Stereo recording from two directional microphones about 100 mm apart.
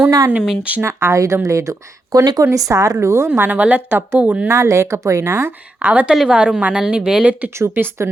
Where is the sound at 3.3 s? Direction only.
15° right (ahead or behind).